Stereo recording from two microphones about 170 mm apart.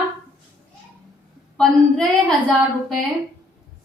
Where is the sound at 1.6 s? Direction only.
5° left (ahead or behind).